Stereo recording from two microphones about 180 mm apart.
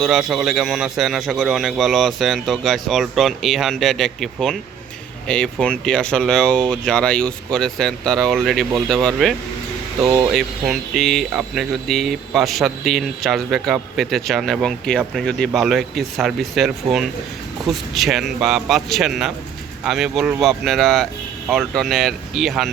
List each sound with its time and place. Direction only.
0.0 s speech: 5° right (ahead or behind)
10.3 s speech: centre (ahead or behind)